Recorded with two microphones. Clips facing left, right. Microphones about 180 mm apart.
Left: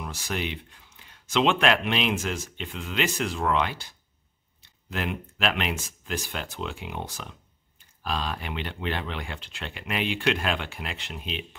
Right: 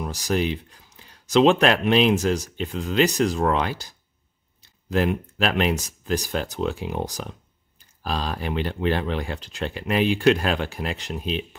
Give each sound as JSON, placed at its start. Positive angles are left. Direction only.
{"t": 0.0, "sound": "speech", "side_deg": -40}